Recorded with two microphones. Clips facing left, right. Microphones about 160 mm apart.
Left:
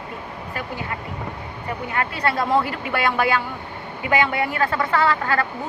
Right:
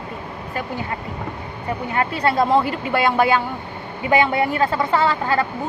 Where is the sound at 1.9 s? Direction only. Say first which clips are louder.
Right 4 dB; 25° right (ahead or behind).